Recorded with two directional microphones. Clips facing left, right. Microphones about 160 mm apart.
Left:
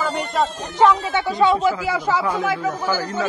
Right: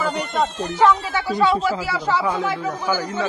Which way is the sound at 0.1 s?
Centre (ahead or behind).